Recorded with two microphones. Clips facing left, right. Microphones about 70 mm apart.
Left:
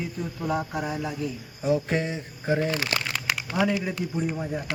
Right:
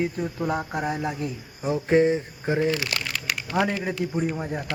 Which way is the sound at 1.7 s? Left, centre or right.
Right.